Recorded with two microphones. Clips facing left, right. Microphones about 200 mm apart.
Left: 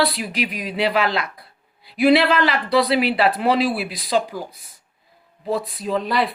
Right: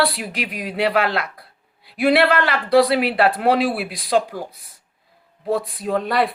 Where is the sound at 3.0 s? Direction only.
60° right (ahead or behind).